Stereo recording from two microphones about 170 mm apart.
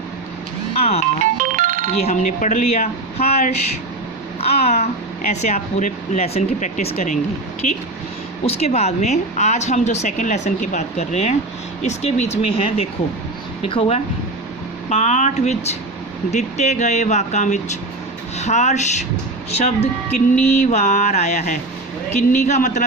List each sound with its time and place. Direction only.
0.8 s speech: 40° left (ahead or behind)
1.2 s music: 50° right (ahead or behind)
2.0 s speech: 40° left (ahead or behind)